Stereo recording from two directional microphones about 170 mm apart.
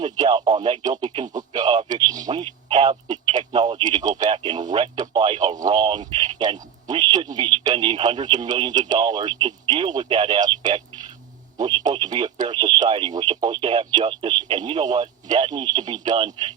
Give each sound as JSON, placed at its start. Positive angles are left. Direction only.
{"t": 0.0, "sound": "a man's voice", "side_deg": -25}